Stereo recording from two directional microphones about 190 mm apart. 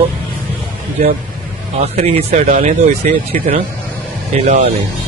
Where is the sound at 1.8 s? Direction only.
35° right (ahead or behind).